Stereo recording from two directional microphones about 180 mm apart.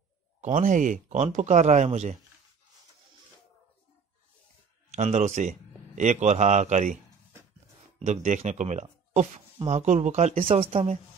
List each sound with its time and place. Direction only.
0.4 s speech: 45° right (ahead or behind)
4.9 s a man's voice: 40° right (ahead or behind)
8.0 s speech: 40° right (ahead or behind)
10.5 s speech: 35° right (ahead or behind)